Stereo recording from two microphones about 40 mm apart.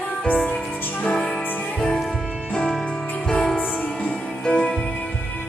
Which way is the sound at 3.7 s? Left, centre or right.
Left.